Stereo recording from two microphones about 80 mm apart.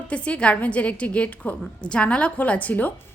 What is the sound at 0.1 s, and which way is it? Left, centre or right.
A woman's voice, centre.